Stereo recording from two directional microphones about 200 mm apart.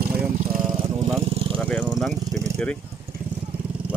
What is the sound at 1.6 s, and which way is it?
Vehicle, 5° left (ahead or behind).